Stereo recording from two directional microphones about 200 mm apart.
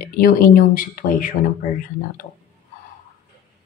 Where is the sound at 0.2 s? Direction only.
45° left (ahead or behind).